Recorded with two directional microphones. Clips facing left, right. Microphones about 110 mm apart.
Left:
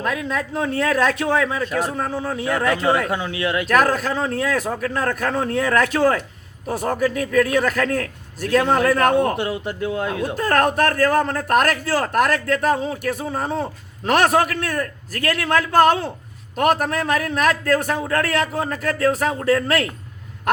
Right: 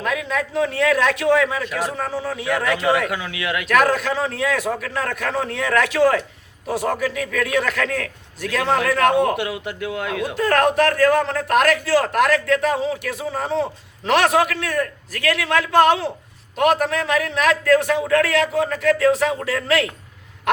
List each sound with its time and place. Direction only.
0.0 s a man's voice: 40° left (ahead or behind)